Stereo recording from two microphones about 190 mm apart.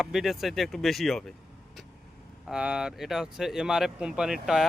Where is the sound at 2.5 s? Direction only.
5° right (ahead or behind).